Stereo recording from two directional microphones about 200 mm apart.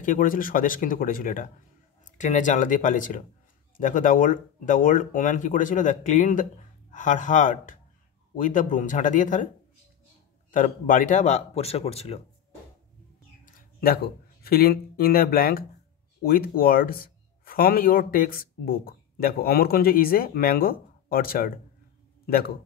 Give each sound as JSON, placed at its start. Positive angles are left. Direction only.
{"t": 0.0, "sound": "speech", "side_deg": 40}
{"t": 10.5, "sound": "speech", "side_deg": 40}
{"t": 13.6, "sound": "speech", "side_deg": 50}